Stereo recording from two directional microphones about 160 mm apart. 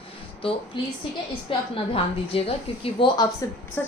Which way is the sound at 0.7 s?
30° left (ahead or behind).